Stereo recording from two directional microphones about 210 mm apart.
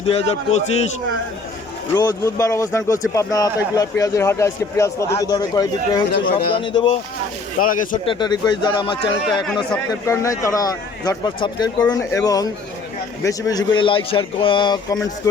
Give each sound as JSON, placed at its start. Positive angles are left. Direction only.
{"t": 0.0, "sound": "speech", "side_deg": 30}
{"t": 2.0, "sound": "a man's voice", "side_deg": 15}
{"t": 7.6, "sound": "speech", "side_deg": 40}
{"t": 8.0, "sound": "a man's voice", "side_deg": 20}